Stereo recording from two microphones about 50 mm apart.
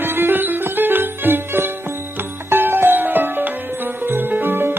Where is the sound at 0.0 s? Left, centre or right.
Right.